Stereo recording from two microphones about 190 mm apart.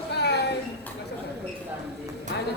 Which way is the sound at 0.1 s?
60° left (ahead or behind).